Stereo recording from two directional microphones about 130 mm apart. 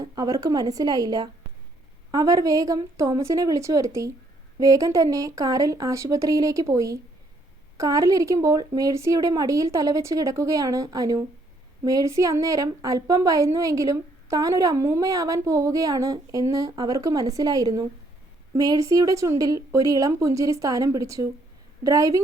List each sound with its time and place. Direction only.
0.0 s a woman's voice: 30° right (ahead or behind)